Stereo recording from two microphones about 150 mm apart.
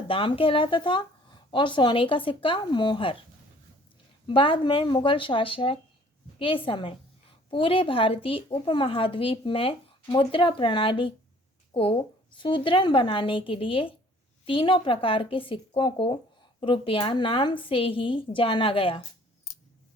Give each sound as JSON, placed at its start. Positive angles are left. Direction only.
{"t": 0.1, "sound": "a woman's voice", "side_deg": 35}
{"t": 4.3, "sound": "a woman's voice", "side_deg": 35}